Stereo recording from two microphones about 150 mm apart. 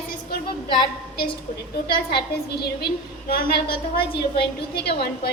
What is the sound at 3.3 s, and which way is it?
A woman's voice, 90° left.